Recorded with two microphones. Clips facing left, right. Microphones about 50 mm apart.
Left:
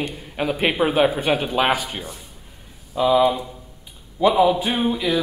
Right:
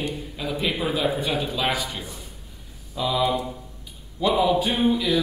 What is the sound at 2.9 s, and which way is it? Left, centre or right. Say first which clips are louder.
Speech: left 6 dB; left.